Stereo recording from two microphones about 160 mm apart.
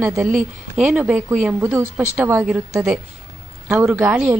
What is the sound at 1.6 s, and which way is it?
A woman's voice, 15° right (ahead or behind).